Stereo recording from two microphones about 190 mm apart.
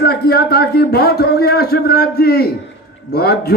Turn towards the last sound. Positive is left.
turn(degrees=55)  # may be behind; listen again after turning